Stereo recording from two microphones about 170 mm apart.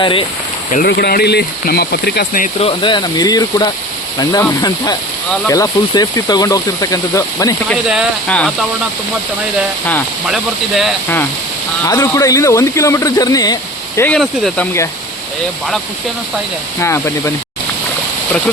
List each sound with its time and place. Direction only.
0.0 s speech: 30° left (ahead or behind)
0.9 s speech: 65° left (ahead or behind)
2.6 s speech: 30° left (ahead or behind)
7.7 s speech: 5° right (ahead or behind)
8.3 s speech: 5° left (ahead or behind)
10.2 s speech: centre (ahead or behind)
11.9 s speech: 20° left (ahead or behind)
14.0 s speech: 5° left (ahead or behind)
16.8 s speech: 15° left (ahead or behind)